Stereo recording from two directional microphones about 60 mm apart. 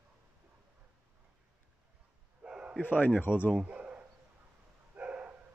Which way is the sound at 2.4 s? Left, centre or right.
Centre.